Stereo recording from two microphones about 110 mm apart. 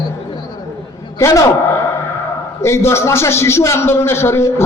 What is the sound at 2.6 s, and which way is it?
A man's voice, 25° left (ahead or behind).